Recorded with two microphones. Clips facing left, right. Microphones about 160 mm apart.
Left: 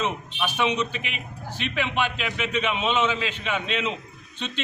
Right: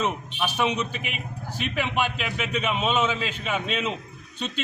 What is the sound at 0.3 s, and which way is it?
A man's voice, 10° right (ahead or behind).